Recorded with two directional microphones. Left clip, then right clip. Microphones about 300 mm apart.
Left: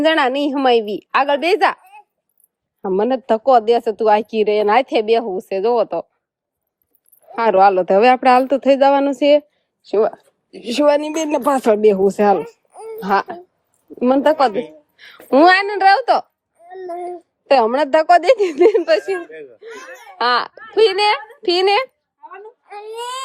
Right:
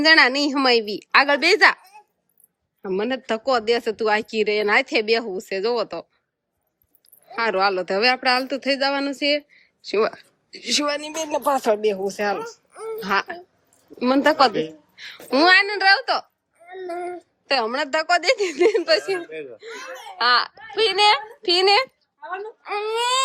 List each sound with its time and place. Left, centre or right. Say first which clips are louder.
0.0 s speech: even; centre
11.1 s speech: left 5 dB; left
12.5 s babbling: even; centre
13.0 s speech: left 5 dB; centre
19.3 s speech: right 1 dB; centre
20.1 s speech: left 2 dB; centre
22.6 s speech: right 5 dB; right